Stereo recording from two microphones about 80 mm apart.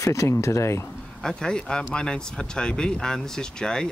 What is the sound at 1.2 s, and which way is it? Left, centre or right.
Speech, centre.